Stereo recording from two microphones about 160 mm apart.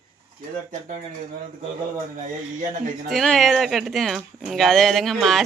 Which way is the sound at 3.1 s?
Centre (ahead or behind).